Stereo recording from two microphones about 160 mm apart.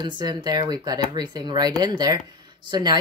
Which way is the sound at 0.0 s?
30° right (ahead or behind).